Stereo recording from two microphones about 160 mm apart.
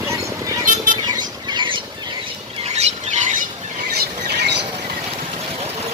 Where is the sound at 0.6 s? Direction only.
55° right (ahead or behind).